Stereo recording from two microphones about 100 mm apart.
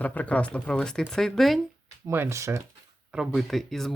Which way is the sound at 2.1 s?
25° right (ahead or behind).